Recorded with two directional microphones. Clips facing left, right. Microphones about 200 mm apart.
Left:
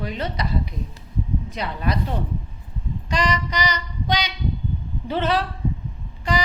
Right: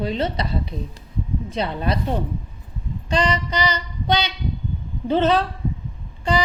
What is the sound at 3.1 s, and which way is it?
A woman's voice, 30° right (ahead or behind).